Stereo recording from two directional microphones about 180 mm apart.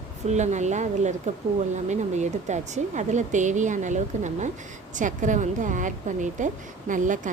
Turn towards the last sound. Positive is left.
turn(degrees=-45)  # may be behind; listen again after turning